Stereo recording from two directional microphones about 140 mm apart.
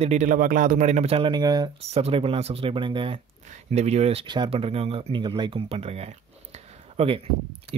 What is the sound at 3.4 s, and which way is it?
Speech, 55° right (ahead or behind).